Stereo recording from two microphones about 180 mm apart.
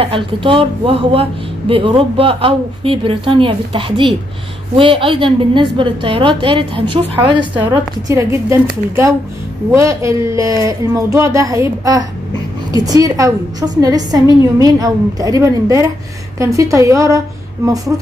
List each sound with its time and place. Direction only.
0.0 s a woman's voice: 30° right (ahead or behind)
7.7 s a woman's voice: 15° right (ahead or behind)